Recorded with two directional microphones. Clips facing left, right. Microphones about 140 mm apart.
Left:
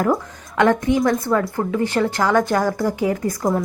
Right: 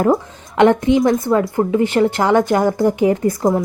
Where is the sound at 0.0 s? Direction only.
25° right (ahead or behind).